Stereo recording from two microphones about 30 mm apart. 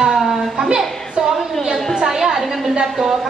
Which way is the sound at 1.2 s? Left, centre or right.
Right.